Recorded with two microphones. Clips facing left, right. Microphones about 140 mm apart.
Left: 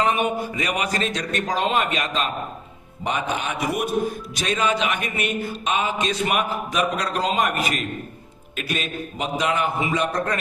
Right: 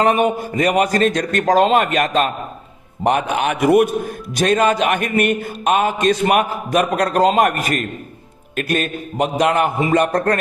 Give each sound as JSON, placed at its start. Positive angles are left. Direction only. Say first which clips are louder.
{"t": 0.0, "sound": "a man's voice", "louder": "right 6 dB", "side_deg": -45}
{"t": 4.4, "sound": "a man's voice", "louder": "right 8 dB", "side_deg": -50}